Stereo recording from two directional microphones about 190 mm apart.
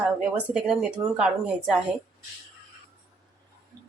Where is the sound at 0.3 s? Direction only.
5° right (ahead or behind).